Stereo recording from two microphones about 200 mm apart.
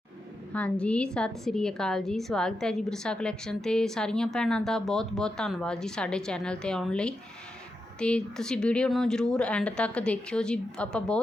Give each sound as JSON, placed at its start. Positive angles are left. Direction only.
{"t": 0.5, "sound": "a woman's voice", "side_deg": 5}